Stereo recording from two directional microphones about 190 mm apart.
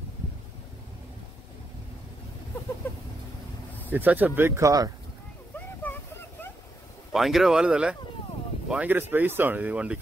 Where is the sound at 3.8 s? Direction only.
10° right (ahead or behind).